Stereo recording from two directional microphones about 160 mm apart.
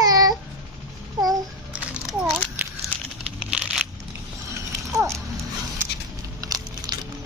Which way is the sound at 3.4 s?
5° right (ahead or behind).